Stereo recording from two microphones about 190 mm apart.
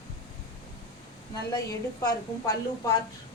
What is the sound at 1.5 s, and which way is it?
A woman's voice, 20° left (ahead or behind).